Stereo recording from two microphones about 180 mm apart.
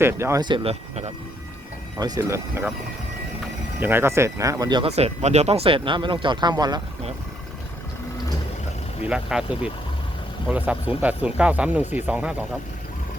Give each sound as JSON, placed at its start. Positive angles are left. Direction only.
{"t": 0.0, "sound": "speech", "side_deg": -15}
{"t": 2.0, "sound": "speech", "side_deg": -20}
{"t": 3.8, "sound": "speech", "side_deg": -10}
{"t": 4.9, "sound": "speech", "side_deg": -35}
{"t": 9.0, "sound": "speech", "side_deg": -5}